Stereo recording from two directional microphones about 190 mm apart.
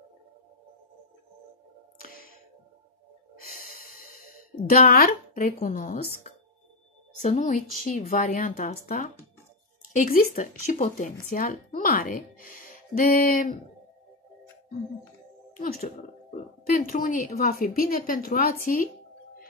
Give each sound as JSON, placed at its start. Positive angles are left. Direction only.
{"t": 3.5, "sound": "a sound", "side_deg": 50}
{"t": 7.2, "sound": "speech", "side_deg": 40}
{"t": 15.5, "sound": "speech", "side_deg": 45}
{"t": 16.9, "sound": "speech", "side_deg": 45}